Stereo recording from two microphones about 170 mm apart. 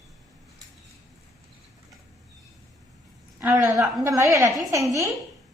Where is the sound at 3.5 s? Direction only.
15° right (ahead or behind).